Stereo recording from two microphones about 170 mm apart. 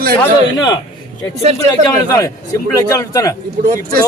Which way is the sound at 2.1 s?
20° left (ahead or behind).